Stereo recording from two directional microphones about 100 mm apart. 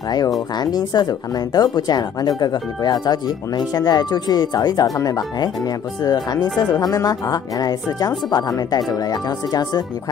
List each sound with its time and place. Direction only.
0.6 s speech: 45° left (ahead or behind)